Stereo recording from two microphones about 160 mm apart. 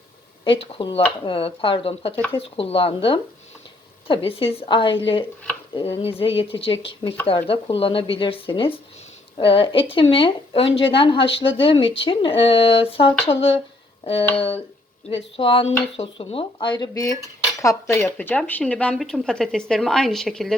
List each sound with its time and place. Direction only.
0.7 s speech: 35° left (ahead or behind); by 20.6 s 5° left (ahead or behind)